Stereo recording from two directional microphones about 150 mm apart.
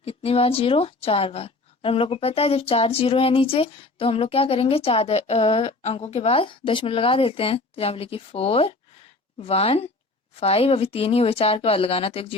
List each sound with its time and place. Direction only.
0.0 s a woman's voice: 40° left (ahead or behind)